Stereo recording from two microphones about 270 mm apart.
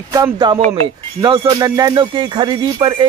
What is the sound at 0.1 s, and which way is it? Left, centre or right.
A man's voice, centre.